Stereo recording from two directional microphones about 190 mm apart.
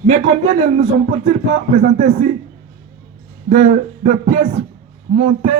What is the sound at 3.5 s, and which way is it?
A man's voice, 40° right (ahead or behind).